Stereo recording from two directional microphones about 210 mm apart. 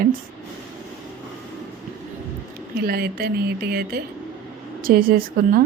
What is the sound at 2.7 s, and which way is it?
A woman's voice, 45° right (ahead or behind).